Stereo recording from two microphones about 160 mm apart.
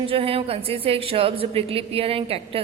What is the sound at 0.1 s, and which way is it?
A woman's voice, 35° right (ahead or behind).